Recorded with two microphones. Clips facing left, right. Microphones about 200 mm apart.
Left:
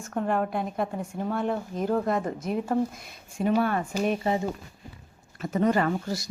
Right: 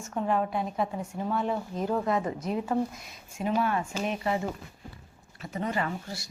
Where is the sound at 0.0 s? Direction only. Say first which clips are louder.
Left 1 dB; 55° left (ahead or behind).